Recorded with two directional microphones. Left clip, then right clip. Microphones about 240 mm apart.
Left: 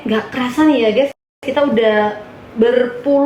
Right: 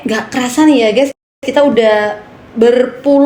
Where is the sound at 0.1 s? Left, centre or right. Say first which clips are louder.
Right 2 dB; right.